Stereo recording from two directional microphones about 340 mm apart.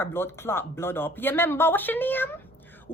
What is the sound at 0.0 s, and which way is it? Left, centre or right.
A woman's voice, centre.